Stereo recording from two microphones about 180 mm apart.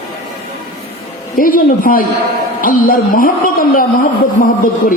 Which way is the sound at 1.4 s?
50° left (ahead or behind).